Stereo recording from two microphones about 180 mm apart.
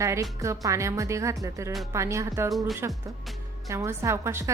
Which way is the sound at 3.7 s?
15° right (ahead or behind).